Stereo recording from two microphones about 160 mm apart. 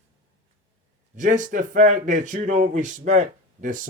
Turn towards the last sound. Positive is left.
turn(degrees=-55)  # may be behind; listen again after turning